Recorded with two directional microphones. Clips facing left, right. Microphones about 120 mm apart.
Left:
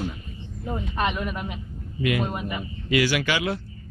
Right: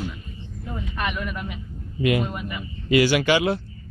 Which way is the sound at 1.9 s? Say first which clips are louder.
Right 3 dB; 30° right (ahead or behind).